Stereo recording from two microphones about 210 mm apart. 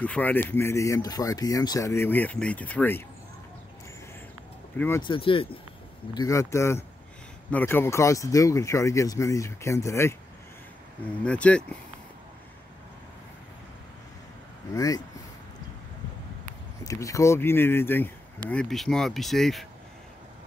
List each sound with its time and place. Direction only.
0.0 s speech: 5° left (ahead or behind)
4.7 s speech: 10° left (ahead or behind)
5.0 s speech: 25° left (ahead or behind)
6.1 s speech: 15° left (ahead or behind)
11.2 s speech: 5° left (ahead or behind)
14.7 s speech: 15° left (ahead or behind)
16.8 s speech: 15° left (ahead or behind)